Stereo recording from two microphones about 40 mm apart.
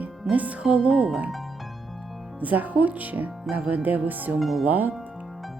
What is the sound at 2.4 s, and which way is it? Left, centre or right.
Speech, right.